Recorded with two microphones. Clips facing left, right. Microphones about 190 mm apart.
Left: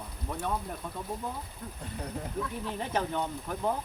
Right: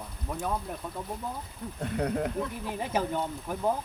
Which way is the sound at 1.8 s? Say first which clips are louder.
Right 10 dB; 70° right (ahead or behind).